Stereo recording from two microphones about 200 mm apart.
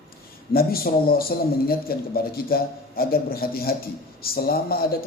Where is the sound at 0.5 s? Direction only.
50° left (ahead or behind).